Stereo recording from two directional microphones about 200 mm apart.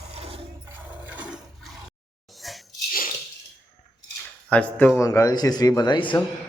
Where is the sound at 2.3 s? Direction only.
Centre (ahead or behind).